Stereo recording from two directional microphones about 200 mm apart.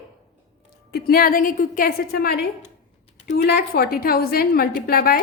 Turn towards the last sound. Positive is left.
turn(degrees=50)  # may be behind; listen again after turning